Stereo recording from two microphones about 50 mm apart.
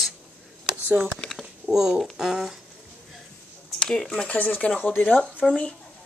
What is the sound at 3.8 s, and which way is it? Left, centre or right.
Speech, centre.